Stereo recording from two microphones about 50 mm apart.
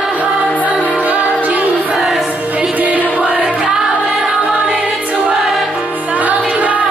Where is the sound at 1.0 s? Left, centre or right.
Right.